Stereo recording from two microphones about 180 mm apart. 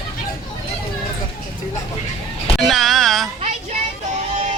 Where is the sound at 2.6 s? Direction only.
Centre (ahead or behind).